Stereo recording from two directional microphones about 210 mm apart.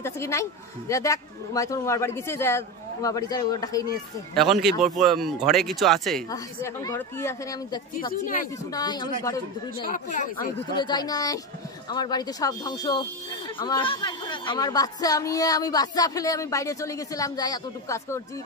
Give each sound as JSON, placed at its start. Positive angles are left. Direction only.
{"t": 0.0, "sound": "a woman's voice", "side_deg": 15}
{"t": 4.4, "sound": "speech", "side_deg": 0}
{"t": 6.3, "sound": "a woman's voice", "side_deg": 15}
{"t": 8.1, "sound": "speech", "side_deg": 40}
{"t": 8.7, "sound": "a woman's voice", "side_deg": 20}
{"t": 9.8, "sound": "speech", "side_deg": 35}
{"t": 10.8, "sound": "a woman's voice", "side_deg": 20}